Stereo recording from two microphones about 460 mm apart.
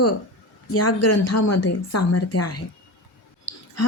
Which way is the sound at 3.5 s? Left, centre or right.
Left.